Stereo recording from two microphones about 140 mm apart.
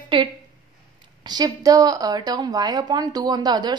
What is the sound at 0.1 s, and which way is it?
A woman's voice, 35° right (ahead or behind).